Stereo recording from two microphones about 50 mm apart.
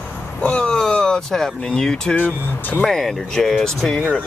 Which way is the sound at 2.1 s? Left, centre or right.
Left.